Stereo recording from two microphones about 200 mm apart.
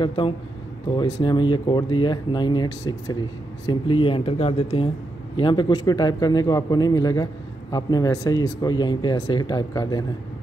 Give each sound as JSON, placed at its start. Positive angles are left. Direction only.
{"t": 0.0, "sound": "a man's voice", "side_deg": 25}